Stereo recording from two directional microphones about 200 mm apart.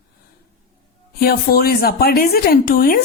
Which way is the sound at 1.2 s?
50° left (ahead or behind).